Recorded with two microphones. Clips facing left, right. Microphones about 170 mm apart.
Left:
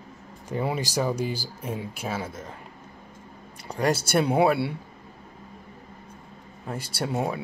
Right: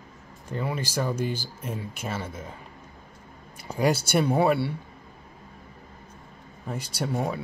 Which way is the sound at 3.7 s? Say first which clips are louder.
Even; centre (ahead or behind).